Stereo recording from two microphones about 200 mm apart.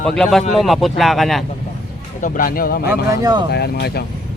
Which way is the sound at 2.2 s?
45° left (ahead or behind).